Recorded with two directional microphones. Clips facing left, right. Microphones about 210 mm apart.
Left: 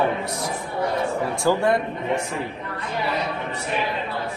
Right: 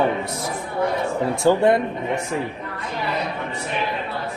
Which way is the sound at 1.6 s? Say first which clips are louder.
Right 4 dB; 25° right (ahead or behind).